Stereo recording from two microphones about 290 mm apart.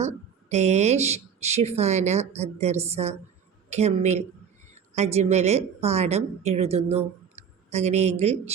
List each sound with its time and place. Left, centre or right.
0.5 s speech: right